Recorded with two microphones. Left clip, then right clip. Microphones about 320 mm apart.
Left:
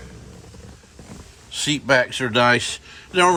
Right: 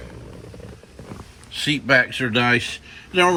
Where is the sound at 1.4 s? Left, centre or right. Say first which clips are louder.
Even; centre.